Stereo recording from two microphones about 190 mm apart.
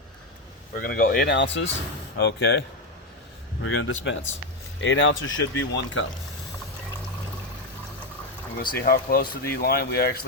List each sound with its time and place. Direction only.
0.8 s speech: 50° left (ahead or behind); by 6.1 s 85° left
8.7 s speech: 50° left (ahead or behind)